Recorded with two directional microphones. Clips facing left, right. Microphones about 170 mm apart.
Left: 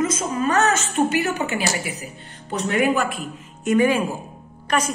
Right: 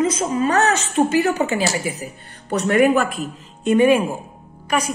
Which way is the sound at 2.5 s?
70° right (ahead or behind).